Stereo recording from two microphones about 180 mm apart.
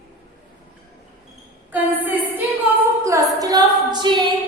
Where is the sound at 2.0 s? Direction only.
10° right (ahead or behind).